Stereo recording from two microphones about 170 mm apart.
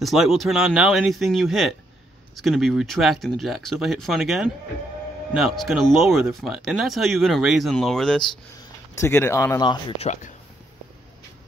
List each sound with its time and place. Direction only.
0.0 s speech: centre (ahead or behind)
8.9 s speech: 15° left (ahead or behind)
9.9 s speech: 45° left (ahead or behind)